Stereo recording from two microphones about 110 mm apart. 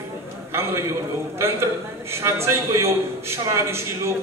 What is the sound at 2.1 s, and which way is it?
A man's voice, 25° right (ahead or behind).